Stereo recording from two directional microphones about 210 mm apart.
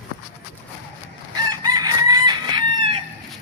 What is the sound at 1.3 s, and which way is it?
Chicken, 20° right (ahead or behind).